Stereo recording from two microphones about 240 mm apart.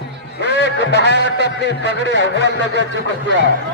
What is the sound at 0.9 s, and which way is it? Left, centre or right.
A man's voice, left.